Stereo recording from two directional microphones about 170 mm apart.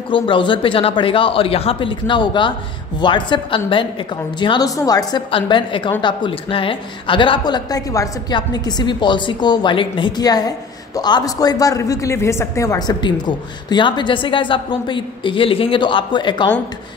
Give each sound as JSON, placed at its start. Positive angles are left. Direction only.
{"t": 0.1, "sound": "speech", "side_deg": 30}